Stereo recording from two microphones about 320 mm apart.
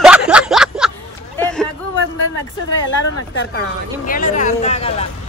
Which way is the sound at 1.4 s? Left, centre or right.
Centre.